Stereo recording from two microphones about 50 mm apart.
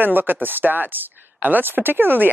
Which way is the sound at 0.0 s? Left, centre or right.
Right.